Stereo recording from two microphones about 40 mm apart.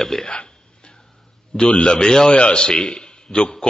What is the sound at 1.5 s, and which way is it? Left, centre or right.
A man's voice, left.